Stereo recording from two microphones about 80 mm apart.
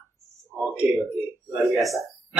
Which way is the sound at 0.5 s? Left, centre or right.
Centre.